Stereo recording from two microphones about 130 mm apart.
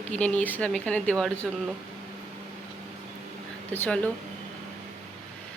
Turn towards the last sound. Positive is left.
turn(degrees=10)  # may be behind; listen again after turning